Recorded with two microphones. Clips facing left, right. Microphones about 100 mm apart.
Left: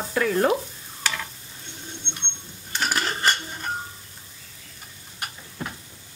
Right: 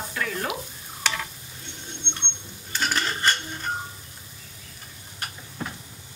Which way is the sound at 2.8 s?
10° left (ahead or behind).